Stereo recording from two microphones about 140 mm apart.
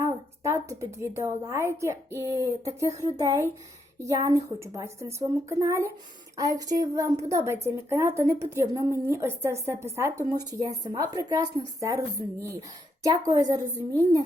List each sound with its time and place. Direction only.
0.0 s a woman's voice: 20° right (ahead or behind)